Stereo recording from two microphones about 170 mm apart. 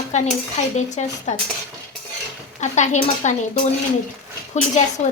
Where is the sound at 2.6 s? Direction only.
45° left (ahead or behind).